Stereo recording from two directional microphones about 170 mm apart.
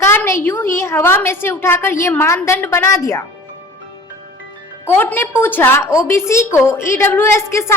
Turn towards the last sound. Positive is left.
turn(degrees=15)  # may be behind; listen again after turning